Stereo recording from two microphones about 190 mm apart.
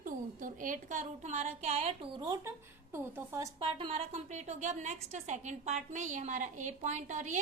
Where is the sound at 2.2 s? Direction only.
15° right (ahead or behind).